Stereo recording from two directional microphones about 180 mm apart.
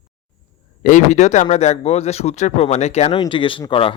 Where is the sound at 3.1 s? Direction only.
25° left (ahead or behind).